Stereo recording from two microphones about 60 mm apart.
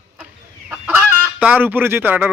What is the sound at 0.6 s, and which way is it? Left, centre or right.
Chicken, right.